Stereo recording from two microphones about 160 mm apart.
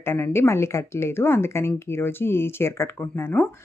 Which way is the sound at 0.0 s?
15° left (ahead or behind).